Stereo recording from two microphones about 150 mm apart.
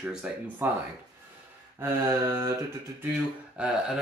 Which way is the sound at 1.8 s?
15° right (ahead or behind).